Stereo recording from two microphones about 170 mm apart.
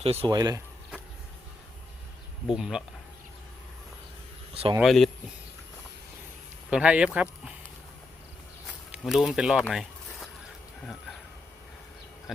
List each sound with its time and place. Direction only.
0.0 s speech: 35° right (ahead or behind)
0.3 s speech: 20° right (ahead or behind)
2.5 s speech: 5° right (ahead or behind)
4.8 s speech: centre (ahead or behind)
6.7 s speech: 5° right (ahead or behind)
8.9 s speech: 5° right (ahead or behind)